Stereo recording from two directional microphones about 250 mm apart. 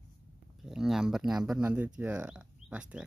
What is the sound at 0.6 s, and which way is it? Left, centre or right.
Speech, centre.